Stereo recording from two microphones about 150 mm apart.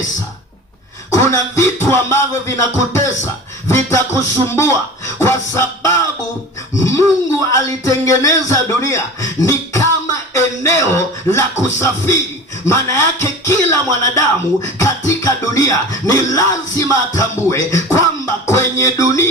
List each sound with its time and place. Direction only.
1.1 s a man's voice: 20° left (ahead or behind)
9.4 s a sound: 20° left (ahead or behind)
12.6 s speech: 20° left (ahead or behind)